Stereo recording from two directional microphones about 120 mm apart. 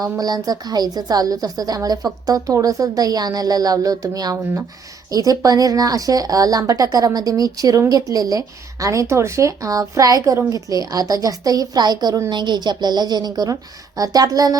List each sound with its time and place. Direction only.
0.0 s a woman's voice: 35° right (ahead or behind)